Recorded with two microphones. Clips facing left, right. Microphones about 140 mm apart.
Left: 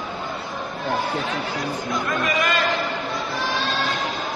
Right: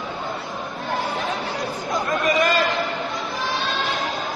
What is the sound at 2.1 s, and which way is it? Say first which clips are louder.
Chatter: right 4 dB; 35° right (ahead or behind).